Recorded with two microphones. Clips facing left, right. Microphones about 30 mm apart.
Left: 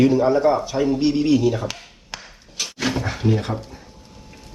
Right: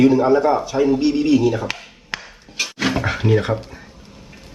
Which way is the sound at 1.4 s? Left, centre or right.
Centre.